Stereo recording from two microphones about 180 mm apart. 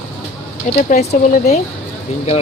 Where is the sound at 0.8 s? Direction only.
40° left (ahead or behind).